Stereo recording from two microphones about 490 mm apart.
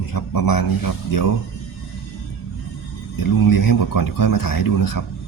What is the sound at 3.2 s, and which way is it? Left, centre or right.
A man's voice, left.